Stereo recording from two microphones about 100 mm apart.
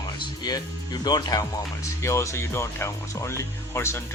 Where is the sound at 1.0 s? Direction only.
45° left (ahead or behind).